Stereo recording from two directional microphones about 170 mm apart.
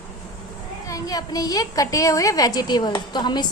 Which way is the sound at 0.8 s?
20° left (ahead or behind).